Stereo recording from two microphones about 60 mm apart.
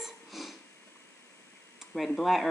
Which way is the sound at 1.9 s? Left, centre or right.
Centre.